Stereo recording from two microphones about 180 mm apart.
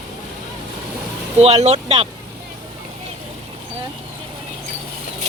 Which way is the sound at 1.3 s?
35° right (ahead or behind).